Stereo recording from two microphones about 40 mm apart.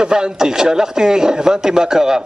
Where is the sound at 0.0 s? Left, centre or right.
Centre.